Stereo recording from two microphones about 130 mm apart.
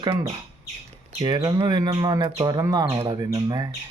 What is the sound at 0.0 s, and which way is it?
Speech, 35° right (ahead or behind).